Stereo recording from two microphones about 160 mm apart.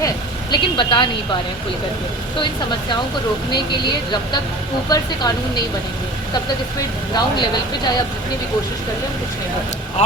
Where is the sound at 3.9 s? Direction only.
25° left (ahead or behind).